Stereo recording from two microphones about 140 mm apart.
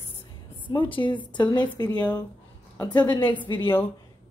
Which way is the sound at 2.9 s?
30° left (ahead or behind).